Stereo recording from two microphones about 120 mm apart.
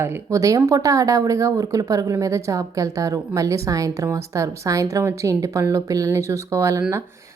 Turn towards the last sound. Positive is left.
turn(degrees=-25)  # may be behind; listen again after turning